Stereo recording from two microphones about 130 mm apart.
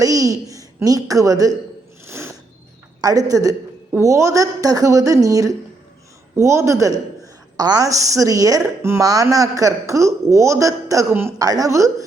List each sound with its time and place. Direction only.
0.0 s a child's voice: 25° right (ahead or behind)
2.0 s a sound: 20° right (ahead or behind)
3.0 s a woman's voice: 25° right (ahead or behind)
11.3 s a woman's voice: 30° right (ahead or behind)